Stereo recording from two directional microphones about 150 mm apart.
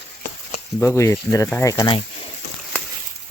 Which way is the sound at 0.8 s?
15° left (ahead or behind).